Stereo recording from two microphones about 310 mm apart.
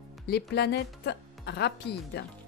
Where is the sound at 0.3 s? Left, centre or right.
Left.